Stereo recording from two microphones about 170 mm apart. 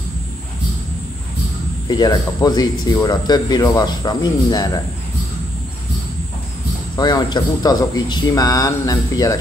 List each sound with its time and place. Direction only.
1.9 s speech: 25° left (ahead or behind)
7.0 s speech: 25° left (ahead or behind)